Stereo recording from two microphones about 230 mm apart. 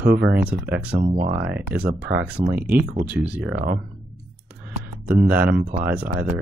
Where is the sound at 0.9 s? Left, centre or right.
Right.